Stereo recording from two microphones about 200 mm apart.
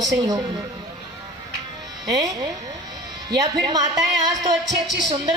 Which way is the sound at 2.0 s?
15° right (ahead or behind).